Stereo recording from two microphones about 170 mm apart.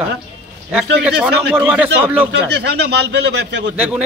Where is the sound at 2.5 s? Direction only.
85° right.